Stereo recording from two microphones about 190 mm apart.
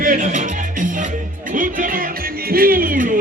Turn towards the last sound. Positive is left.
turn(degrees=-45)  # may be behind; listen again after turning